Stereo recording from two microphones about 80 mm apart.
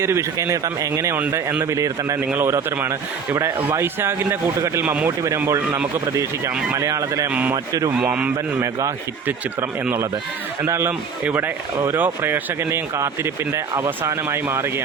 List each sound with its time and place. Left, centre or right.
0.0 s speech: right
2.1 s speech: right
7.3 s speech: centre
7.5 s speech: right
8.0 s a man's voice: centre
10.7 s speech: right